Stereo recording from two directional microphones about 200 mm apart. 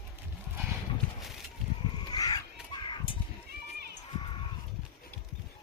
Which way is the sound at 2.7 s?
25° left (ahead or behind).